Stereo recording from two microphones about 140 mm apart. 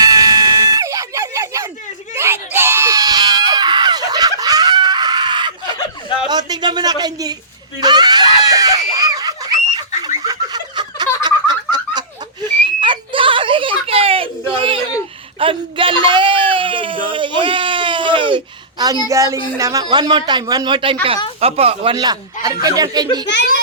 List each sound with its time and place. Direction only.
0.0 s music: 25° right (ahead or behind)
2.1 s screaming: 15° right (ahead or behind); by 5.7 s 35° right (ahead or behind)
6.2 s speech: 30° right (ahead or behind)
7.8 s screaming: 30° right (ahead or behind)
10.2 s snicker: 30° right (ahead or behind)
14.5 s a sound: 35° right (ahead or behind); by 19.4 s 20° right (ahead or behind)
19.5 s speech: 25° right (ahead or behind); by 21.9 s 45° right (ahead or behind)
21.9 s speech: 30° right (ahead or behind)